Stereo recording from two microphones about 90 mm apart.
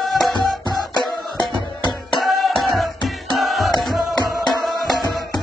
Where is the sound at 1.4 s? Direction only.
60° left (ahead or behind).